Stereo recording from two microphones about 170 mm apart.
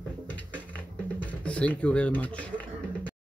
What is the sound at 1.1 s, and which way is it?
Speech, 5° left (ahead or behind).